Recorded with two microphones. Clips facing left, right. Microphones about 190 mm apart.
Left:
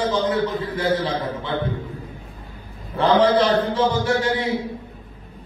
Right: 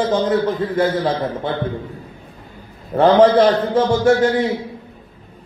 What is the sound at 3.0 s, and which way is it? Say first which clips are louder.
A man's voice: right 5 dB; 50° right (ahead or behind).